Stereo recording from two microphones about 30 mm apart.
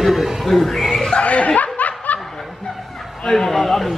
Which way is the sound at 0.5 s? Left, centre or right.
Centre.